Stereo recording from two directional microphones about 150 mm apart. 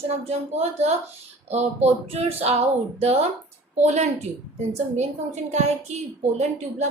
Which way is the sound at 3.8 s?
50° right (ahead or behind).